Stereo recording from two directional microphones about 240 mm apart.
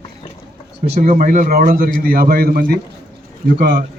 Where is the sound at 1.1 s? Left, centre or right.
Right.